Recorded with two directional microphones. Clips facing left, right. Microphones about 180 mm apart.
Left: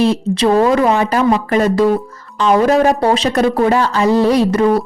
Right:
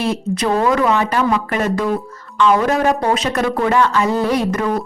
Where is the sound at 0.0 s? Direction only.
30° left (ahead or behind).